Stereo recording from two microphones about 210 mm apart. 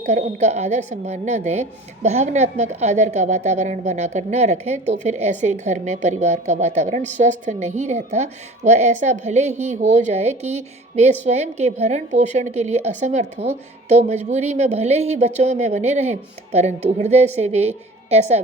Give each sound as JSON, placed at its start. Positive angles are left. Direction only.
{"t": 0.0, "sound": "speech", "side_deg": -35}